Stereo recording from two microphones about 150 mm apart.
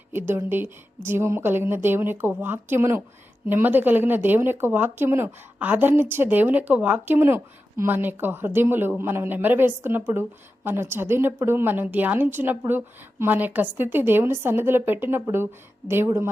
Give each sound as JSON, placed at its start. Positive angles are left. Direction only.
{"t": 0.1, "sound": "speech", "side_deg": -15}